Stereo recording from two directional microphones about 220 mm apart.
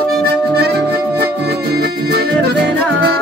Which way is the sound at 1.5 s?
45° right (ahead or behind).